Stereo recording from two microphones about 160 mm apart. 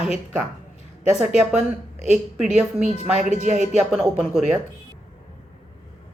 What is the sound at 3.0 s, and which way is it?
Speech, 45° right (ahead or behind).